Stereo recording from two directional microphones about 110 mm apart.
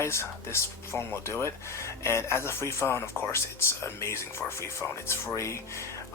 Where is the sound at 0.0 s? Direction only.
25° left (ahead or behind).